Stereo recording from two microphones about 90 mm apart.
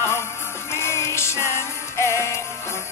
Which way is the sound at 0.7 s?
30° left (ahead or behind).